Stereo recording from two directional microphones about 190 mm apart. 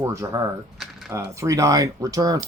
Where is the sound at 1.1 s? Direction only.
15° right (ahead or behind).